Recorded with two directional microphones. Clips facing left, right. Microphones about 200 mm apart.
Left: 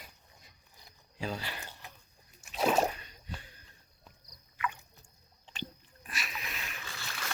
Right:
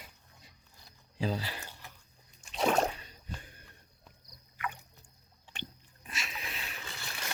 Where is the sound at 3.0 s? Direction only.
35° right (ahead or behind).